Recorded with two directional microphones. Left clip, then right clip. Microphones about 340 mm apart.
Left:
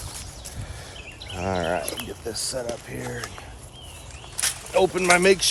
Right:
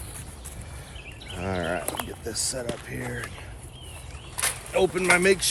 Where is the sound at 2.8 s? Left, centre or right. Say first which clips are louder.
Left 1 dB; centre.